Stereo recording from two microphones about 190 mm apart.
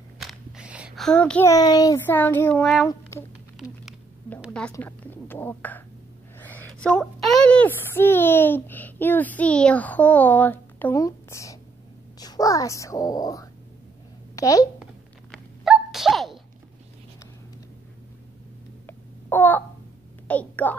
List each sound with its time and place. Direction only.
0.2 s a child's voice: 5° right (ahead or behind)
2.9 s speech: 15° left (ahead or behind)
4.5 s a woman's voice: 5° left (ahead or behind)
15.3 s sneeze: centre (ahead or behind)
18.9 s babbling: 10° left (ahead or behind)
20.2 s a sound: 10° left (ahead or behind)